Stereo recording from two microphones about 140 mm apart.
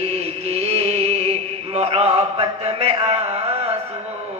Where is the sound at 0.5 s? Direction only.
50° right (ahead or behind).